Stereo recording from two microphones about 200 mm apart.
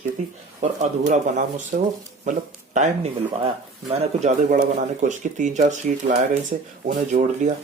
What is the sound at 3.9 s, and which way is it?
Speech, 35° right (ahead or behind).